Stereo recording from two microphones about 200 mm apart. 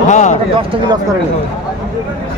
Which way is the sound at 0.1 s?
35° left (ahead or behind).